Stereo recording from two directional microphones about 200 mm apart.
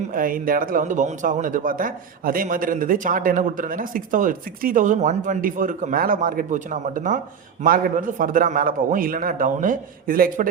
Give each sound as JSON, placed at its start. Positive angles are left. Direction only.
{"t": 0.1, "sound": "a man's voice", "side_deg": -45}